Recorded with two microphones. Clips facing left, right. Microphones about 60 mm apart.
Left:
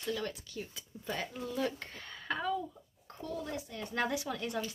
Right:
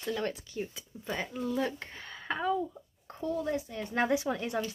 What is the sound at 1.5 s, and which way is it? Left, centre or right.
Speech, right.